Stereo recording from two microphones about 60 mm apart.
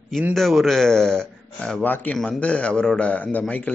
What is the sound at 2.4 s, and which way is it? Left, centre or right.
A man's voice, left.